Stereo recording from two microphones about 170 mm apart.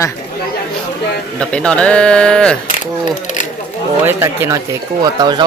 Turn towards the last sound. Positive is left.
turn(degrees=-25)  # may be behind; listen again after turning